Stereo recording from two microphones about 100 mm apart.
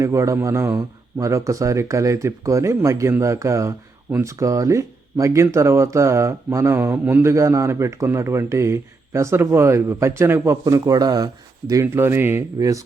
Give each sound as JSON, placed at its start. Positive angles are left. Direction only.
{"t": 0.0, "sound": "speech", "side_deg": -30}
{"t": 11.9, "sound": "speech", "side_deg": -20}
{"t": 12.5, "sound": "speech", "side_deg": -35}